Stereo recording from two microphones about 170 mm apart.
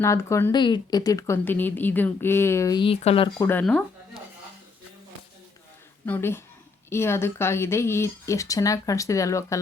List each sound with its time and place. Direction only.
0.0 s speech: 15° left (ahead or behind)
2.8 s speech: 35° left (ahead or behind)
3.3 s speech: 10° left (ahead or behind)
6.1 s speech: 15° left (ahead or behind)